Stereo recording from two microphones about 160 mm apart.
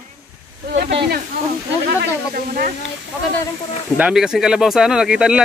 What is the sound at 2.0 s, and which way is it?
Speech, 65° right (ahead or behind).